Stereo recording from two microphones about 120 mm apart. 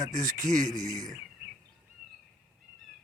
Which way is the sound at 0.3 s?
90° right.